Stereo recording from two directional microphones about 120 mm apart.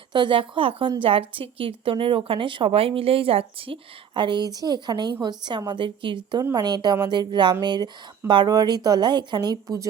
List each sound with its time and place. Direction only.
0.1 s a woman's voice: 40° right (ahead or behind)
6.4 s speech: 35° right (ahead or behind)